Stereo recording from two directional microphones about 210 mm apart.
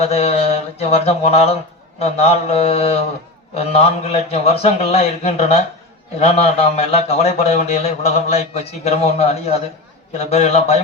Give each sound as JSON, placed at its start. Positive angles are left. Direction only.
{"t": 0.0, "sound": "a man's voice", "side_deg": 30}